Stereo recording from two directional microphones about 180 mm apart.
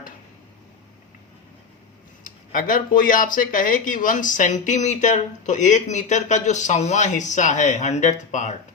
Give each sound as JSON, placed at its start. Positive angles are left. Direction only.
{"t": 2.2, "sound": "speech", "side_deg": 50}